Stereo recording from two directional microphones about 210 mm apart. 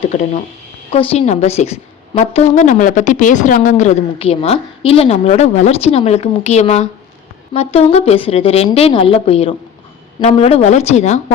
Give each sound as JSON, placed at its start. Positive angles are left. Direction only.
{"t": 0.9, "sound": "a woman's voice", "side_deg": 25}